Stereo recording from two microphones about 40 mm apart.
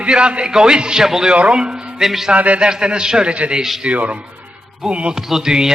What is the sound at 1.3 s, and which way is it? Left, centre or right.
Speech, right.